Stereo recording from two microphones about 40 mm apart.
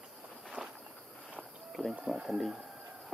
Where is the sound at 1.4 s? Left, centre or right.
Centre.